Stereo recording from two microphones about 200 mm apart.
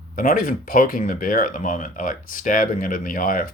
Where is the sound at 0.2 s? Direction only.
45° left (ahead or behind).